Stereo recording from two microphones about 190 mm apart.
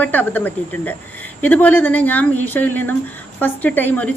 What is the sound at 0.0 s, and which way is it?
Speech, 10° left (ahead or behind).